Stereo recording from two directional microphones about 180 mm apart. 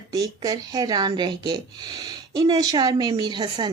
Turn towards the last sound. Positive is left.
turn(degrees=-25)  # may be behind; listen again after turning